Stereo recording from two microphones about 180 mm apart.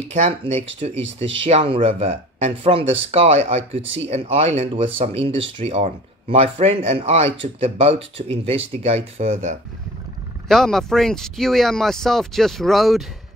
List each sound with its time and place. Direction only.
0.1 s speech: 40° right (ahead or behind)
10.5 s speech: centre (ahead or behind)